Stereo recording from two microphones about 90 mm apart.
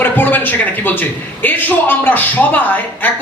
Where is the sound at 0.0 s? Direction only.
20° left (ahead or behind).